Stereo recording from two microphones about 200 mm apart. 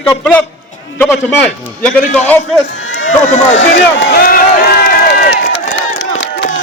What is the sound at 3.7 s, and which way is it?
Run, 65° left (ahead or behind).